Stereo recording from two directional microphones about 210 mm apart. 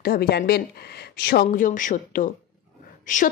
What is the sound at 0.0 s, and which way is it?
A woman's voice, 50° left (ahead or behind).